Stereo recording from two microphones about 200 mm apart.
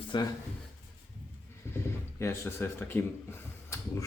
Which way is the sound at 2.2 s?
15° left (ahead or behind).